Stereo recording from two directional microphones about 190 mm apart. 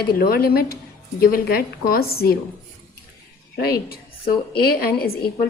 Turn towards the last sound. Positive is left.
turn(degrees=50)  # may be behind; listen again after turning